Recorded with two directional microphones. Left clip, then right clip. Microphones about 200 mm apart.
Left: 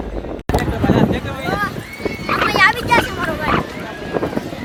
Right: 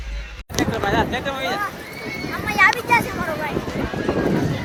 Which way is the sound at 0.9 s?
45° right (ahead or behind).